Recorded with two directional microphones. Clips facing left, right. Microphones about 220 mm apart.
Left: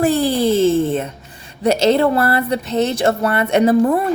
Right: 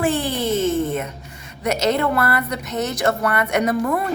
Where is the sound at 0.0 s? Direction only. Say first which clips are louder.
Left 6 dB; 35° left (ahead or behind).